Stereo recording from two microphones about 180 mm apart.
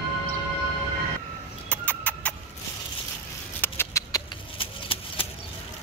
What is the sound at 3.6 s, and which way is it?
Rodents, 10° left (ahead or behind).